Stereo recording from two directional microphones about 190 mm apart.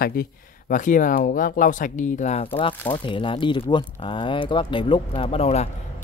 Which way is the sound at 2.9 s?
25° left (ahead or behind).